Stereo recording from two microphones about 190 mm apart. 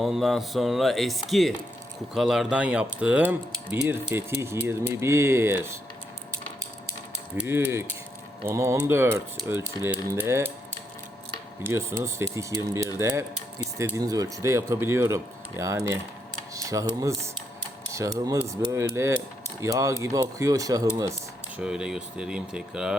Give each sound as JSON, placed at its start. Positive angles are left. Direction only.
{"t": 0.0, "sound": "speech", "side_deg": 0}
{"t": 7.3, "sound": "speech", "side_deg": -10}
{"t": 11.6, "sound": "speech", "side_deg": -15}
{"t": 21.6, "sound": "speech", "side_deg": -5}